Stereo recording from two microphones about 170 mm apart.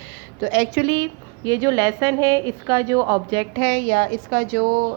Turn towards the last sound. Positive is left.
turn(degrees=-65)  # may be behind; listen again after turning